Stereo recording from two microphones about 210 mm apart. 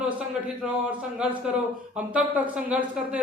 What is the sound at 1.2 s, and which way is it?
Speech, 5° right (ahead or behind).